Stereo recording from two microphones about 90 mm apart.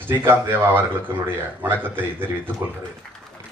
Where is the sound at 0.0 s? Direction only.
25° right (ahead or behind).